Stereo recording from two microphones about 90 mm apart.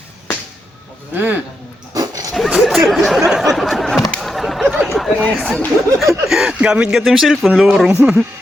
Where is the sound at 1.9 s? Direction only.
40° right (ahead or behind).